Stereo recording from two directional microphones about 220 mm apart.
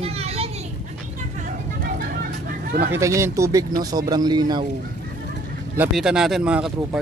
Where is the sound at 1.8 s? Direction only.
40° right (ahead or behind).